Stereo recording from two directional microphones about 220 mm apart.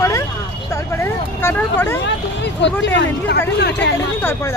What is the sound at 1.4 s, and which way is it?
Speech, 10° left (ahead or behind).